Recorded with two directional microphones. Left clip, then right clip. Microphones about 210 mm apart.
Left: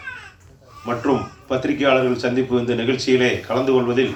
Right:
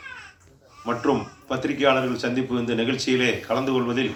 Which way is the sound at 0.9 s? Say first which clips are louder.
Left 3 dB; 55° right (ahead or behind).